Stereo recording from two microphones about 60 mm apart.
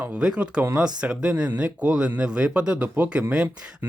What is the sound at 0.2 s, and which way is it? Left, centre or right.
Speech, centre.